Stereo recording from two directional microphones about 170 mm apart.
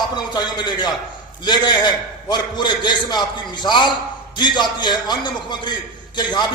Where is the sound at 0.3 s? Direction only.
25° left (ahead or behind).